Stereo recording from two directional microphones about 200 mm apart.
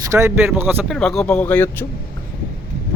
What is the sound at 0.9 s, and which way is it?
Speech, centre (ahead or behind).